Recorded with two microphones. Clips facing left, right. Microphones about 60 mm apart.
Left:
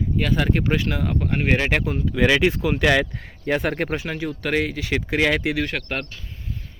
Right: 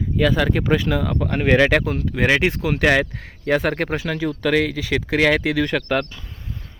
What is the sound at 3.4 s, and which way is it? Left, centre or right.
Speech, right.